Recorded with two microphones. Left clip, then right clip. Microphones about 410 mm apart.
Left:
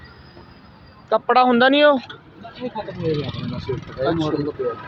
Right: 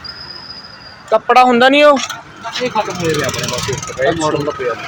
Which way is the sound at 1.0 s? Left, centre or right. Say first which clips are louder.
Right 6 dB; left.